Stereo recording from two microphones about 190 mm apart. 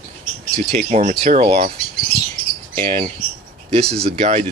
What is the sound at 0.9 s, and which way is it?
Speech, 35° right (ahead or behind).